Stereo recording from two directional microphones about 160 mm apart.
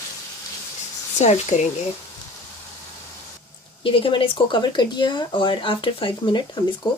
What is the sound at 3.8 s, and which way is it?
Speech, 30° left (ahead or behind).